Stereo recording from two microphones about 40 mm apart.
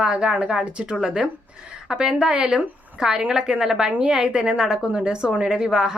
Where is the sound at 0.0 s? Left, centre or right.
Centre.